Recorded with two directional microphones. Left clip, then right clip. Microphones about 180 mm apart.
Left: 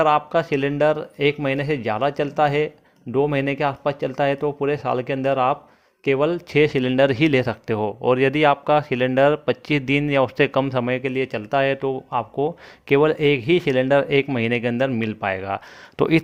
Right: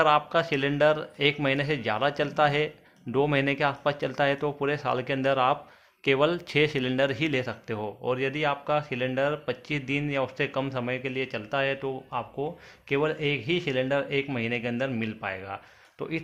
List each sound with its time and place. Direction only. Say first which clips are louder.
0.0 s speech: left 4 dB; 35° left (ahead or behind); by 16.2 s 60° left (ahead or behind)